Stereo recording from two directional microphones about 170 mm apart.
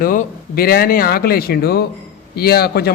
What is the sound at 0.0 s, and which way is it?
A man's voice, 55° left (ahead or behind).